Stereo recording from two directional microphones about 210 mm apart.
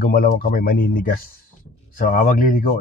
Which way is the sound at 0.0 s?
45° left (ahead or behind).